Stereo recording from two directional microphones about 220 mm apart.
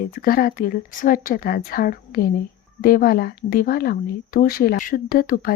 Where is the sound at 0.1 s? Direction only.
40° left (ahead or behind).